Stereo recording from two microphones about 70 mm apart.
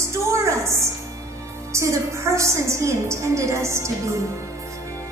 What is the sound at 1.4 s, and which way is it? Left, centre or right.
A woman's voice, right.